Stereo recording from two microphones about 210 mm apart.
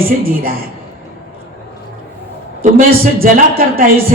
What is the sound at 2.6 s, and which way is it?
A man's voice, 40° right (ahead or behind).